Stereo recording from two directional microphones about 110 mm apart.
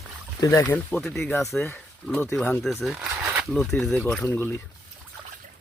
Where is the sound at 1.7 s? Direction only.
20° left (ahead or behind).